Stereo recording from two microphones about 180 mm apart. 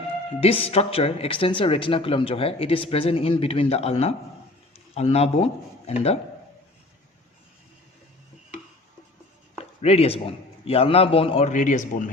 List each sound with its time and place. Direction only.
0.3 s speech: 30° left (ahead or behind)
9.8 s speech: 35° left (ahead or behind)